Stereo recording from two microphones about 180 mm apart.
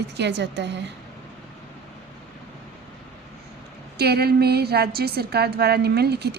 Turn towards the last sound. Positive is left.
turn(degrees=-65)  # may be behind; listen again after turning